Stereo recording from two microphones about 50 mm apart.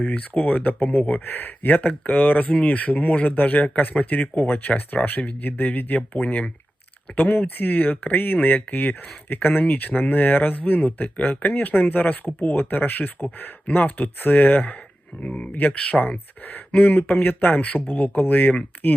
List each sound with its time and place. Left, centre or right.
0.0 s speech: left
15.2 s speech: left